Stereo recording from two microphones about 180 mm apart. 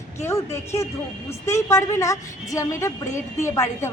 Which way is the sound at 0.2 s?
15° left (ahead or behind).